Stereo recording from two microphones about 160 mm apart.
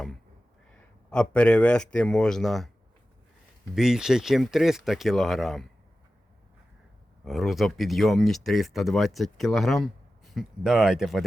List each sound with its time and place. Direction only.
0.7 s a man's voice: 5° left (ahead or behind)
3.8 s speech: 5° right (ahead or behind)
7.3 s speech: centre (ahead or behind)